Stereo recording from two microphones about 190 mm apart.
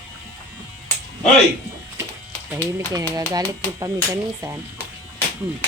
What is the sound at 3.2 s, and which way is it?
Speech, 20° right (ahead or behind).